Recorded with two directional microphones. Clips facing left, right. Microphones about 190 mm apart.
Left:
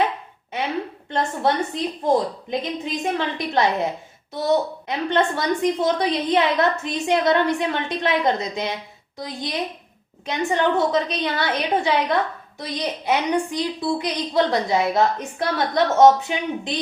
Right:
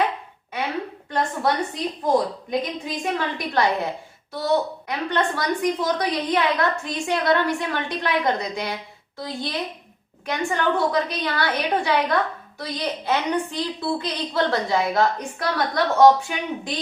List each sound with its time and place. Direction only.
1.1 s a woman's voice: 25° left (ahead or behind)
4.9 s a woman's voice: 25° left (ahead or behind)